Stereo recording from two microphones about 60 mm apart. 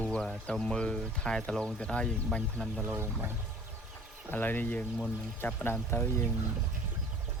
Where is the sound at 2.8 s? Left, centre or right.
Right.